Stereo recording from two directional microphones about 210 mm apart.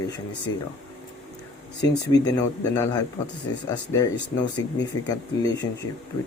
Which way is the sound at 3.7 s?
15° left (ahead or behind).